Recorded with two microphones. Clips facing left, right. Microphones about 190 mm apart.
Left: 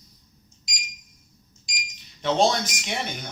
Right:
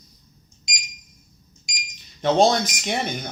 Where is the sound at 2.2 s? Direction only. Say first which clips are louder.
Right 4 dB; 40° right (ahead or behind).